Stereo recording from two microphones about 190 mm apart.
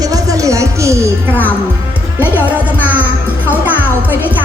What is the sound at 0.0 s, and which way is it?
Music, 20° right (ahead or behind).